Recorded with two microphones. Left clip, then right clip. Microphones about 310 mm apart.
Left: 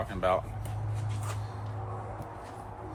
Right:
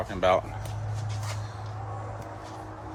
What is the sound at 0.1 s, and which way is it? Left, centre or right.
Speech, right.